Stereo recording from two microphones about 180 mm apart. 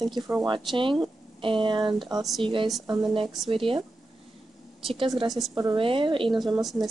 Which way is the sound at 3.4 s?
30° right (ahead or behind).